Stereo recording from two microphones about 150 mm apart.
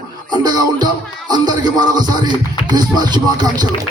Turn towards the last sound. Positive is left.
turn(degrees=-30)  # may be behind; listen again after turning